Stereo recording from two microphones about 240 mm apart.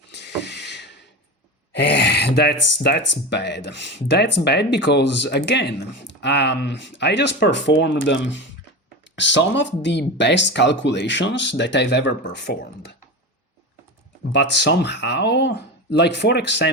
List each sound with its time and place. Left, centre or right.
0.1 s a sound: left
1.7 s speech: left
14.3 s speech: left